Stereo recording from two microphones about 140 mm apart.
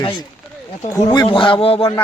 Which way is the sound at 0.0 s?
35° left (ahead or behind).